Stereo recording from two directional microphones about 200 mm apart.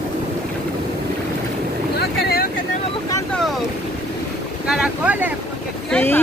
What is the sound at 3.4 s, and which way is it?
Boat, centre (ahead or behind).